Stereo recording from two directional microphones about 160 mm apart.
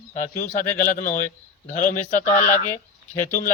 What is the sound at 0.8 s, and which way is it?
A man's voice, 55° left (ahead or behind).